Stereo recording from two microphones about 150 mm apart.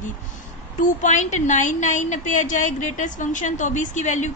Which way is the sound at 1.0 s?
55° left (ahead or behind).